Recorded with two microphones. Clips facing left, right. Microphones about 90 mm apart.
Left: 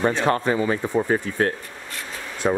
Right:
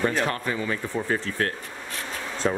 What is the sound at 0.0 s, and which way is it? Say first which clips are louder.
Speech: left 5 dB; 20° left (ahead or behind).